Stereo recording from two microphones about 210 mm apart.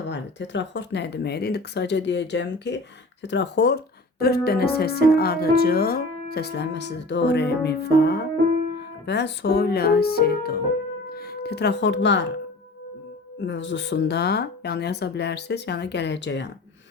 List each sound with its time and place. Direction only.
0.1 s speech: 55° left (ahead or behind)
13.4 s speech: 60° left (ahead or behind)